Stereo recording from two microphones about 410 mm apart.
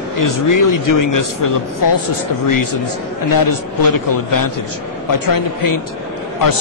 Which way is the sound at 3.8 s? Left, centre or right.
Left.